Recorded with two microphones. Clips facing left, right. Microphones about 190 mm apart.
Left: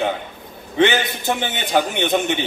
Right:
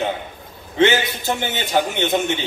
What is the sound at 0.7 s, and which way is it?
A man's voice, 20° left (ahead or behind).